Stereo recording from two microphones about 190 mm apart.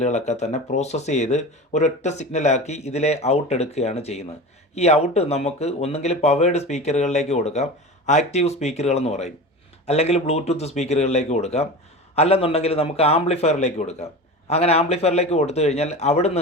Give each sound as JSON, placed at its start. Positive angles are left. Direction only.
{"t": 0.0, "sound": "speech", "side_deg": 35}